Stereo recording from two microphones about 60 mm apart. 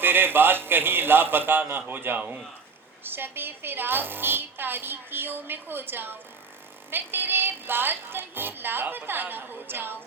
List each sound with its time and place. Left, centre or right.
0.0 s a woman's voice: right